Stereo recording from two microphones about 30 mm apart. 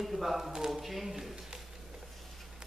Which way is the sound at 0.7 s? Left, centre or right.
Centre.